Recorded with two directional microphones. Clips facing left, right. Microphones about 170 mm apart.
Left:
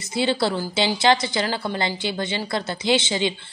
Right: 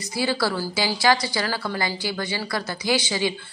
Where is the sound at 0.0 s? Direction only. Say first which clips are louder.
Left 2 dB; 25° left (ahead or behind).